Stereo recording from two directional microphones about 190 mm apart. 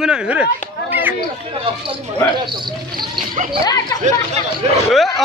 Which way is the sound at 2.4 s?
25° right (ahead or behind).